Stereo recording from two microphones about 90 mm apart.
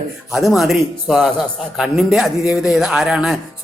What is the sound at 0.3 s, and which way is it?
Speech, centre (ahead or behind).